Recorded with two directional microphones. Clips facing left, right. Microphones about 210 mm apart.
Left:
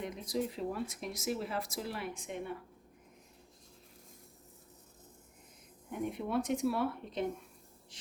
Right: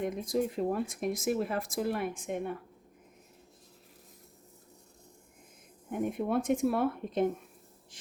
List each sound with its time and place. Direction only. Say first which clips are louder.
0.0 s speech: right 5 dB; 50° right (ahead or behind)
5.9 s speech: right 4 dB; 50° right (ahead or behind)